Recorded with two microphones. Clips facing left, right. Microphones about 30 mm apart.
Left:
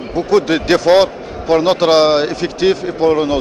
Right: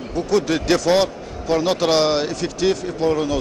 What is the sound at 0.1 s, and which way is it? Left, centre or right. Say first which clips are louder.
A man's voice: left 6 dB; left.